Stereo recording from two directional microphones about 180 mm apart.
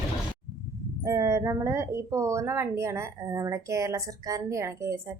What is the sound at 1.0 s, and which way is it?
Speech, 15° right (ahead or behind).